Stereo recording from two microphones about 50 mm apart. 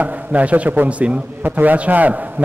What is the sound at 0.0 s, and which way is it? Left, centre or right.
A man's voice, right.